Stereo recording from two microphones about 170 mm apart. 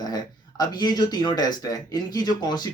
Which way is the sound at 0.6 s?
25° left (ahead or behind).